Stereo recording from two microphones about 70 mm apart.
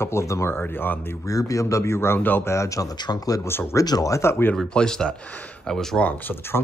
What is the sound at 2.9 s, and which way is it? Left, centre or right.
Speech, left.